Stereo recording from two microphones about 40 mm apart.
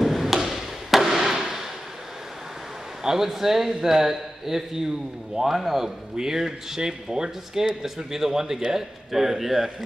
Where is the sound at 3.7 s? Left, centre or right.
Centre.